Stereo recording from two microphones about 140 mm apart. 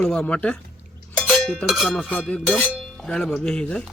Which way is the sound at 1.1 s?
5° left (ahead or behind).